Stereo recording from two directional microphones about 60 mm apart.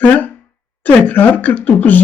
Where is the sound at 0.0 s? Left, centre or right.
Left.